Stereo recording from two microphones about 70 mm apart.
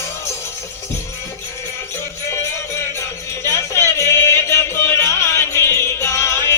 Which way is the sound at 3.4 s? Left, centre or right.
Left.